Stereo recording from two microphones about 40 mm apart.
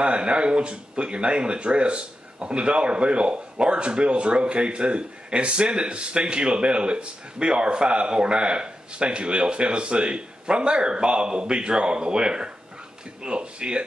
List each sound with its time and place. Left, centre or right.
0.0 s speech: right